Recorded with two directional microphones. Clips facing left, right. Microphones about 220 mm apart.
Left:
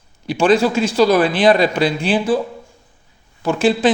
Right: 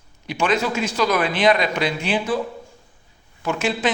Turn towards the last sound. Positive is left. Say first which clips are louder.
# left 7 dB
turn(degrees=30)  # may be behind; listen again after turning